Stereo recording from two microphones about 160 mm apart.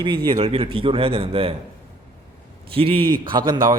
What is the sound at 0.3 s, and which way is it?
A man's voice, 35° right (ahead or behind).